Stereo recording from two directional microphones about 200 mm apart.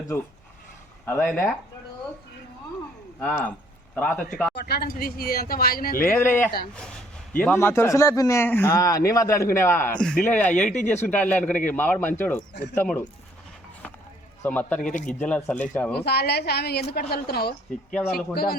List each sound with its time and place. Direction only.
1.0 s speech: 5° left (ahead or behind)
3.2 s speech: 10° left (ahead or behind)
4.5 s speech: 50° left (ahead or behind)
6.0 s speech: 10° left (ahead or behind)
10.3 s speech: 40° left (ahead or behind)
10.8 s speech: 10° left (ahead or behind)
14.4 s speech: 10° left (ahead or behind)
16.0 s speech: 55° left (ahead or behind)